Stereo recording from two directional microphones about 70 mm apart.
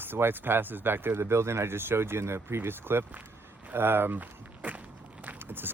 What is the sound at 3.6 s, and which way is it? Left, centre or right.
Walk, right.